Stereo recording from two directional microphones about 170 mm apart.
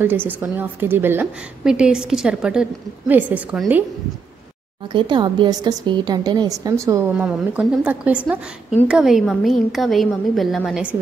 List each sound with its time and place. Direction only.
0.0 s a woman's voice: 10° right (ahead or behind)
4.9 s a woman's voice: 25° right (ahead or behind); by 11.0 s 5° right (ahead or behind)